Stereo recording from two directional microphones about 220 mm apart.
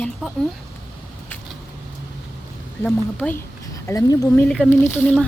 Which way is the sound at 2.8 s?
5° left (ahead or behind).